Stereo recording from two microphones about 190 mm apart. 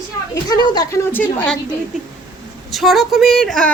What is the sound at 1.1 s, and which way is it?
Speech, 10° left (ahead or behind).